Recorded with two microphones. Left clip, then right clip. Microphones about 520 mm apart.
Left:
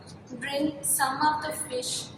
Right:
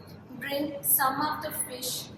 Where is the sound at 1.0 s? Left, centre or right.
Right.